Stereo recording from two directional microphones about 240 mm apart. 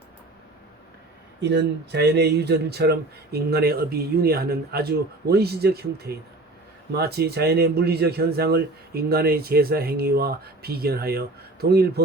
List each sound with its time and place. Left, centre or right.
1.4 s a man's voice: right